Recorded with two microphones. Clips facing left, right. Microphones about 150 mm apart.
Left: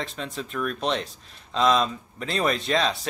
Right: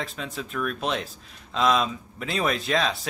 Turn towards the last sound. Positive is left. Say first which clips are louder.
# left 1 dB
turn(degrees=0)  # may be behind; listen again after turning